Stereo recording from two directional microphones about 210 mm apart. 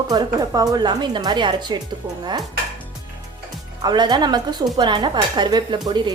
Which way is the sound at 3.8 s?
20° right (ahead or behind).